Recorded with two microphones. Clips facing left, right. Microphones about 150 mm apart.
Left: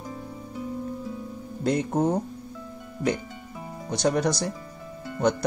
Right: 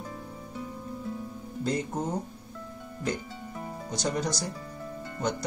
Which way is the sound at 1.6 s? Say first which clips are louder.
Left 6 dB; 70° left (ahead or behind).